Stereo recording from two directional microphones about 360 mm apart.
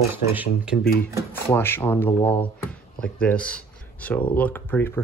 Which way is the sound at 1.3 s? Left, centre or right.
Centre.